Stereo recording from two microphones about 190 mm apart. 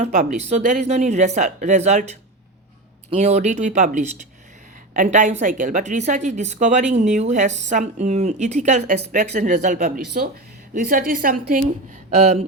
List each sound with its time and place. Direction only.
0.0 s a woman's voice: 40° right (ahead or behind)
12.1 s a woman's voice: 35° right (ahead or behind)